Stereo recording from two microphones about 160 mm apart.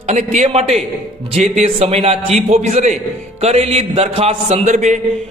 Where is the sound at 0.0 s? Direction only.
50° right (ahead or behind).